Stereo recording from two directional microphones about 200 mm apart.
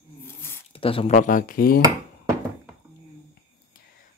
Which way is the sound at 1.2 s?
40° left (ahead or behind).